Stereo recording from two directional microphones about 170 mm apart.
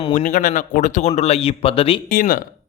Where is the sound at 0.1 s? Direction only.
50° left (ahead or behind); by 2.0 s 35° left (ahead or behind).